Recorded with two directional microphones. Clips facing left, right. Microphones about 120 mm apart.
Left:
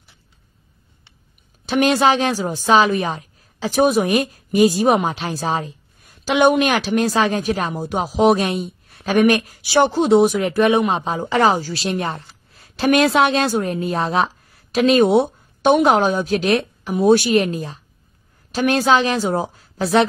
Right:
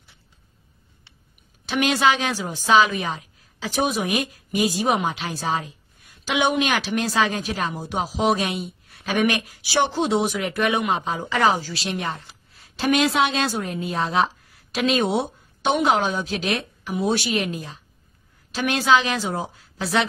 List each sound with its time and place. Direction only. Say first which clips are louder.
1.7 s a woman's voice: left 5 dB; 40° left (ahead or behind)
12.5 s a woman's voice: left 5 dB; 55° left (ahead or behind)